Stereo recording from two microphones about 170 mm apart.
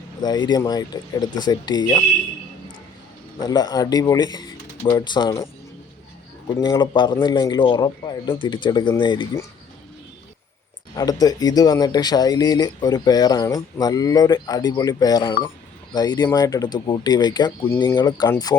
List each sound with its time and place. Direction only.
0.2 s speech: 25° left (ahead or behind)
3.4 s speech: 25° left (ahead or behind)
6.7 s speech: 25° left (ahead or behind)
10.9 s speech: 20° left (ahead or behind)